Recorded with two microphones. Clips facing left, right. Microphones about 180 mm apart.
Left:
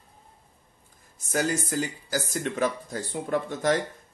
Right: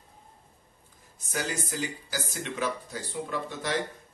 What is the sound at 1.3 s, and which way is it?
Speech, 50° left (ahead or behind).